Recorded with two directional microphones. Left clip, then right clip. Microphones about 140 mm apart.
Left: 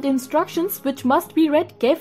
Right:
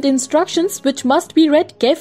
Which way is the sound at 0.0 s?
25° right (ahead or behind).